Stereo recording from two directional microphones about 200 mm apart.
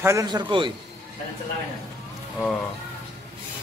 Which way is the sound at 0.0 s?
15° right (ahead or behind).